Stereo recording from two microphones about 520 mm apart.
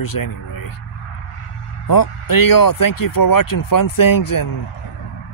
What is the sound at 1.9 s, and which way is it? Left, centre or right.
Speech, left.